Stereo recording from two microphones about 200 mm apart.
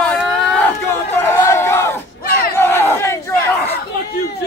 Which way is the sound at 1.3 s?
10° left (ahead or behind).